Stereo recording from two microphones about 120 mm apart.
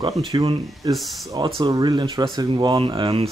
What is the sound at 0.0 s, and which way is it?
Speech, 40° right (ahead or behind).